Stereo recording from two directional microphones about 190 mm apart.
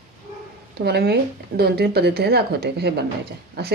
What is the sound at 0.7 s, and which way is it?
A woman's voice, 60° right (ahead or behind).